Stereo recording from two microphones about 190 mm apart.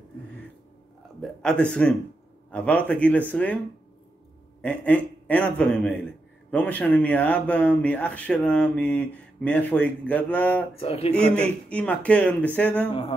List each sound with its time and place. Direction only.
1.2 s a man's voice: 5° left (ahead or behind)
4.6 s speech: 5° left (ahead or behind)
10.8 s speech: 30° left (ahead or behind)
11.1 s speech: 5° left (ahead or behind)